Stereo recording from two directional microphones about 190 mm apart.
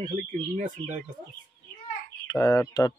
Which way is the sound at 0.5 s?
45° right (ahead or behind).